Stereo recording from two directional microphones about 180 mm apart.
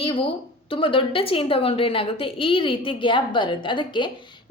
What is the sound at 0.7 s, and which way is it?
A woman's voice, 30° left (ahead or behind).